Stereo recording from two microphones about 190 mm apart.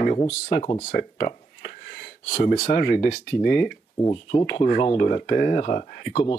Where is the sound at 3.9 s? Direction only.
20° left (ahead or behind).